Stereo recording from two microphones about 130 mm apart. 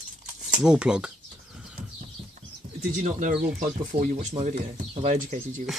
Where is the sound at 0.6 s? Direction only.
5° right (ahead or behind).